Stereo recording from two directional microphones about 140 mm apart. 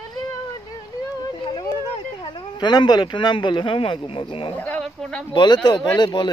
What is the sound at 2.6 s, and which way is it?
Speech, 30° left (ahead or behind).